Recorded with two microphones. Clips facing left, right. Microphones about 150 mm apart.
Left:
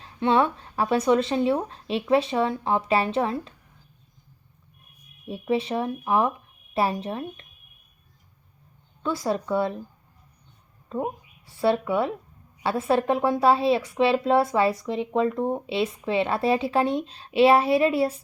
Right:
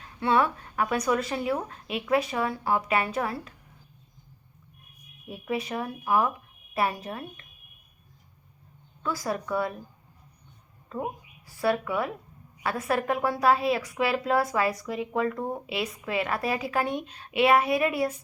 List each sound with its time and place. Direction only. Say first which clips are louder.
0.0 s a woman's voice: left 3 dB; 25° left (ahead or behind)
5.3 s a woman's voice: left 6 dB; 25° left (ahead or behind)
9.0 s a woman's voice: left 4 dB; 25° left (ahead or behind)
10.8 s a woman's voice: left 4 dB; 25° left (ahead or behind)